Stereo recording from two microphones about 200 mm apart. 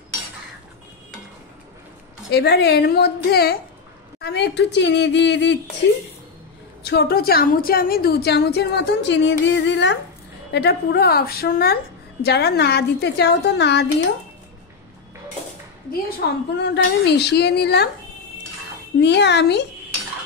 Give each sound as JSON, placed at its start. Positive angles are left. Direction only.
{"t": 2.3, "sound": "a woman's voice", "side_deg": 55}
{"t": 16.2, "sound": "a woman's voice", "side_deg": 55}
{"t": 18.9, "sound": "a woman's voice", "side_deg": 60}